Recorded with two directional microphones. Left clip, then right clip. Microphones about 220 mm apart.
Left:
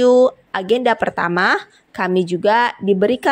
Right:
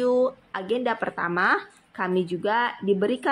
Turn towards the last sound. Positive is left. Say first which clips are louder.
# left 8 dB
turn(degrees=25)  # may be behind; listen again after turning